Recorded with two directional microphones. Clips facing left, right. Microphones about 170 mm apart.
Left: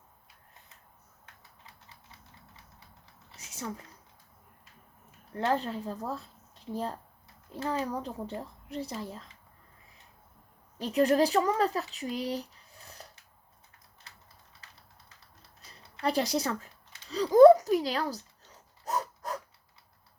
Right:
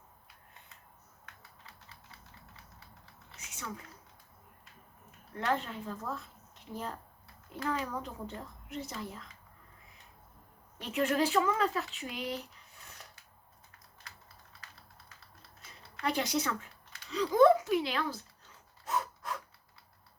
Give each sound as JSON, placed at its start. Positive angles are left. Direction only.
{"t": 5.3, "sound": "speech", "side_deg": 35}
{"t": 10.8, "sound": "speech", "side_deg": 35}
{"t": 15.6, "sound": "speech", "side_deg": 35}
{"t": 18.9, "sound": "a sound", "side_deg": 40}